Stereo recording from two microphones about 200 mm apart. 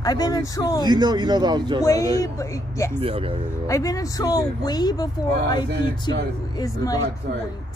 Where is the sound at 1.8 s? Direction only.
15° left (ahead or behind).